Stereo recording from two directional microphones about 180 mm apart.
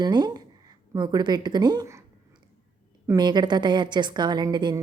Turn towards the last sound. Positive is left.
turn(degrees=-25)  # may be behind; listen again after turning